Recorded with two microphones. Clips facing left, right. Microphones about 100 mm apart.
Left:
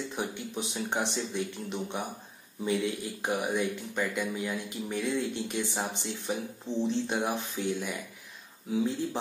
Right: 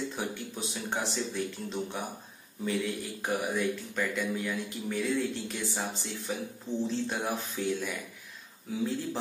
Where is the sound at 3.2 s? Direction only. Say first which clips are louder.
Left 1 dB; 15° left (ahead or behind).